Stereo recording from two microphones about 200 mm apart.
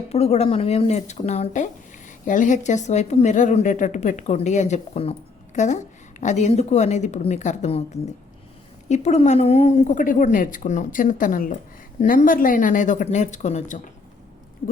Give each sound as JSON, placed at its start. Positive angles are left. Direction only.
{"t": 0.1, "sound": "speech", "side_deg": 30}
{"t": 8.9, "sound": "speech", "side_deg": 35}